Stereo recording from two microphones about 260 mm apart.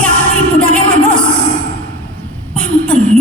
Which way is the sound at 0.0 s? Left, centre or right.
Centre.